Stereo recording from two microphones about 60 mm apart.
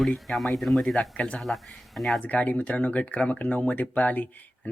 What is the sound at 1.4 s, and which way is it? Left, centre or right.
Speech, centre.